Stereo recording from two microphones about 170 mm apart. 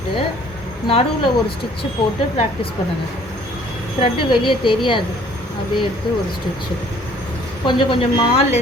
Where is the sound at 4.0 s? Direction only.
30° left (ahead or behind).